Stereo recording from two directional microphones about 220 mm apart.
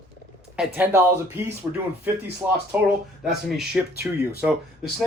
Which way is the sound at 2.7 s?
5° right (ahead or behind).